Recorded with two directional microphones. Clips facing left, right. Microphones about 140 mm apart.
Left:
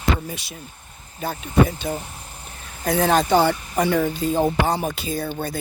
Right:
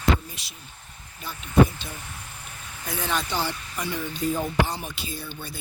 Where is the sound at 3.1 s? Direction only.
45° left (ahead or behind).